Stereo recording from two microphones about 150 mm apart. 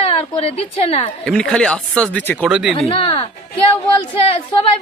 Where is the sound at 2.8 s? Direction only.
35° left (ahead or behind).